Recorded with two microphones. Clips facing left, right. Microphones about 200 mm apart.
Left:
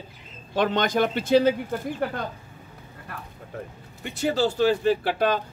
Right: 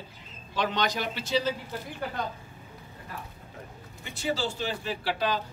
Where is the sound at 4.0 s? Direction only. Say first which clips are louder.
Left 7 dB; 65° left (ahead or behind).